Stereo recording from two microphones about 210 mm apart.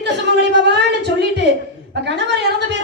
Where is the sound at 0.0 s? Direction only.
55° right (ahead or behind).